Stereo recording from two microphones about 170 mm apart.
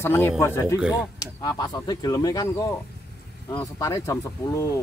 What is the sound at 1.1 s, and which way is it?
Speech, 20° left (ahead or behind).